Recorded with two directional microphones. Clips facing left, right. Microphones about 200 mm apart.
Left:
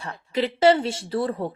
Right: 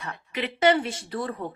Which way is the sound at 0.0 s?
30° left (ahead or behind).